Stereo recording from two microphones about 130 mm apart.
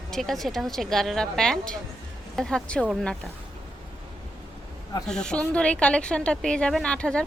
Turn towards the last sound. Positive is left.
turn(degrees=10)  # may be behind; listen again after turning